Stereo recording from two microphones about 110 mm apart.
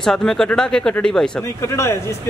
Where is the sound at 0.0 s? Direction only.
5° left (ahead or behind).